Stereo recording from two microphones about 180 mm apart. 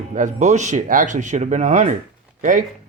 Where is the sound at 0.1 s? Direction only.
45° right (ahead or behind).